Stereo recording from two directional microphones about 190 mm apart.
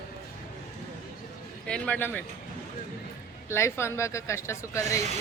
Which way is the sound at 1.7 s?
5° left (ahead or behind).